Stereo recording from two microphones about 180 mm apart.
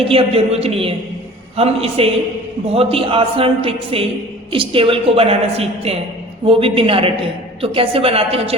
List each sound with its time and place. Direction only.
0.0 s a man's voice: 30° right (ahead or behind)